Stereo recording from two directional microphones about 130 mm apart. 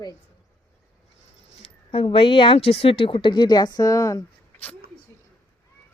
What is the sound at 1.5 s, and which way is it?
Speech, 55° left (ahead or behind).